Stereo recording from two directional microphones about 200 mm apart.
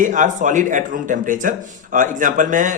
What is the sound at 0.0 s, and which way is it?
Speech, 40° right (ahead or behind).